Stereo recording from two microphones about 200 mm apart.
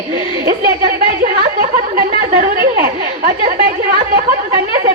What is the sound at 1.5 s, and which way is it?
Speech, 40° right (ahead or behind).